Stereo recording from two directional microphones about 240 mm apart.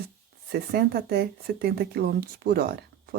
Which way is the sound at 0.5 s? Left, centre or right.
Right.